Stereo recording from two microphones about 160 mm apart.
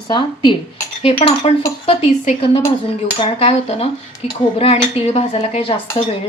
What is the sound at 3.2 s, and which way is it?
Speech, 35° left (ahead or behind).